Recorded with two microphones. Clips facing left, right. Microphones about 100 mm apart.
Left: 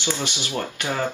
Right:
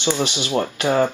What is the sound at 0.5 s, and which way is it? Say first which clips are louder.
Speech: right 9 dB; 30° right (ahead or behind).